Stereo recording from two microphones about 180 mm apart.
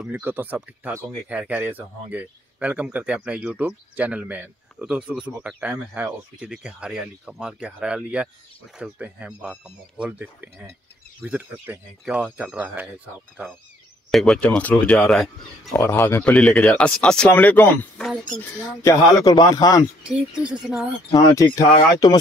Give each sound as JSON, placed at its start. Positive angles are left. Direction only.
{"t": 0.0, "sound": "speech", "side_deg": -10}
{"t": 14.1, "sound": "speech", "side_deg": 5}
{"t": 15.8, "sound": "speech", "side_deg": 15}
{"t": 18.4, "sound": "speech", "side_deg": 15}
{"t": 20.1, "sound": "speech", "side_deg": -5}
{"t": 21.1, "sound": "speech", "side_deg": 20}